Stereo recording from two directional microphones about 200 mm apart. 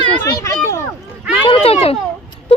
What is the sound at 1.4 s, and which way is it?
Speech, 25° left (ahead or behind).